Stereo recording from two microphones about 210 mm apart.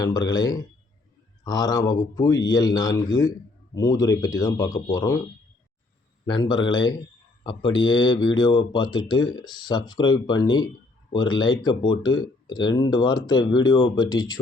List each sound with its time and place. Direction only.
0.0 s speech: 20° left (ahead or behind)
6.2 s speech: 20° left (ahead or behind)